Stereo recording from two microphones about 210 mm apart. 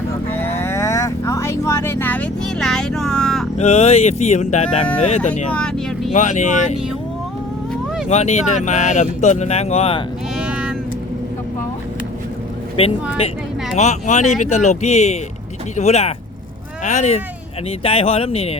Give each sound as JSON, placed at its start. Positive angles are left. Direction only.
{"t": 0.3, "sound": "vehicle", "side_deg": 10}
{"t": 3.6, "sound": "speech", "side_deg": 30}
{"t": 5.3, "sound": "speech", "side_deg": 5}
{"t": 6.1, "sound": "speech", "side_deg": 35}
{"t": 8.1, "sound": "speech", "side_deg": 30}
{"t": 10.3, "sound": "music", "side_deg": -5}
{"t": 12.8, "sound": "speech", "side_deg": 25}